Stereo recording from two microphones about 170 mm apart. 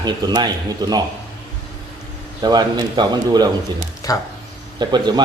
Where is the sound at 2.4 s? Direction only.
25° right (ahead or behind).